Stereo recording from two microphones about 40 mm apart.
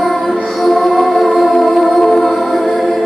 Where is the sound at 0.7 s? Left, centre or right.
Centre.